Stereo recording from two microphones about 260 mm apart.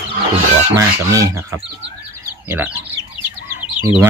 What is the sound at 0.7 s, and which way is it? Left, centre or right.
Speech, centre.